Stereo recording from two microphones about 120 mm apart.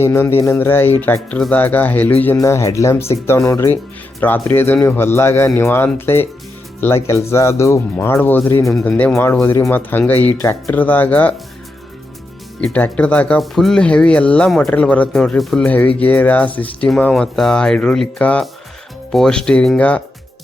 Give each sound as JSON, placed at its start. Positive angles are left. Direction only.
{"t": 0.0, "sound": "speech", "side_deg": 20}
{"t": 2.4, "sound": "speech", "side_deg": 25}
{"t": 12.6, "sound": "speech", "side_deg": 10}